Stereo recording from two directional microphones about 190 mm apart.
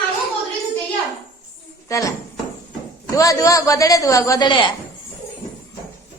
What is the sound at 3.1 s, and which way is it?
A woman's voice, 15° left (ahead or behind).